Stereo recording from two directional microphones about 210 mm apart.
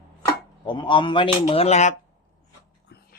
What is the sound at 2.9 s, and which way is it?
Whispering, 55° left (ahead or behind).